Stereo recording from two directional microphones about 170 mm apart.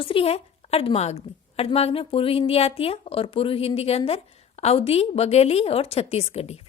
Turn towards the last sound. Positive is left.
turn(degrees=35)  # may be behind; listen again after turning